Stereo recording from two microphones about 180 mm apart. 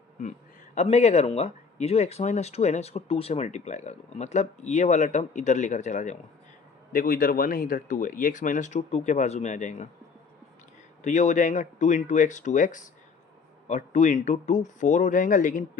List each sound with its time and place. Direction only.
0.8 s speech: 40° left (ahead or behind)
11.0 s speech: 40° left (ahead or behind)